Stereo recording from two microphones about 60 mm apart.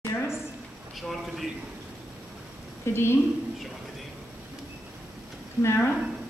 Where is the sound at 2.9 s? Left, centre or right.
Left.